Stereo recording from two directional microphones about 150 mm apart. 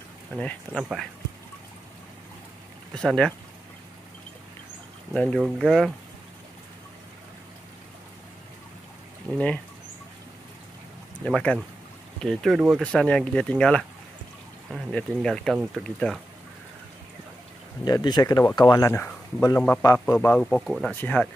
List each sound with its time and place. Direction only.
0.4 s speech: 10° left (ahead or behind)
2.9 s speech: 5° left (ahead or behind)
5.1 s speech: 5° left (ahead or behind)
11.2 s speech: 5° left (ahead or behind)
15.5 s speech: 5° right (ahead or behind)
15.8 s speech: 5° left (ahead or behind)
17.8 s speech: 25° left (ahead or behind)